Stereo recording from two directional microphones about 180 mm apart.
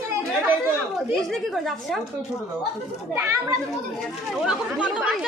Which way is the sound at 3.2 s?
15° right (ahead or behind).